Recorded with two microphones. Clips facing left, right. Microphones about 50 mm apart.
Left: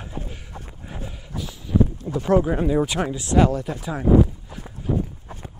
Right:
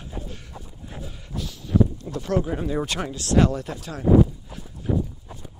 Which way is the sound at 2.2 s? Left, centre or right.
Left.